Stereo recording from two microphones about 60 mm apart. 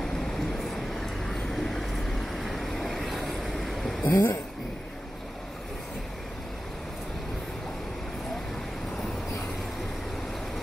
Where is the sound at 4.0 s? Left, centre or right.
Left.